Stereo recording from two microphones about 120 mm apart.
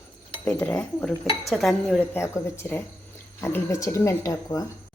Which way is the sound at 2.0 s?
20° left (ahead or behind).